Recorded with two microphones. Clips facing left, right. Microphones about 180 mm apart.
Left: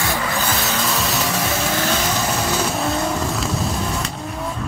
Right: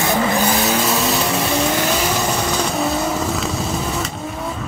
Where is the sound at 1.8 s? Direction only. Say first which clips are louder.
Right 2 dB; 10° right (ahead or behind).